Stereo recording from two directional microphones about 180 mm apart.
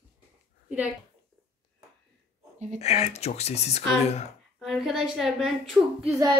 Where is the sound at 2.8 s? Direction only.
35° left (ahead or behind).